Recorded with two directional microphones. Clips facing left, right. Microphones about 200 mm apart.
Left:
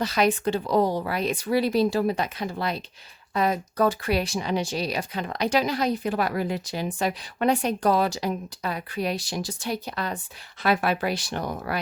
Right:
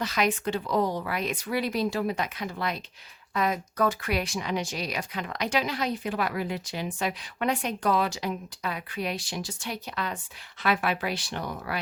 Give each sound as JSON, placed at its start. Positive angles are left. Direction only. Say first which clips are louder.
{"t": 0.0, "sound": "speech", "louder": "left 4 dB", "side_deg": 35}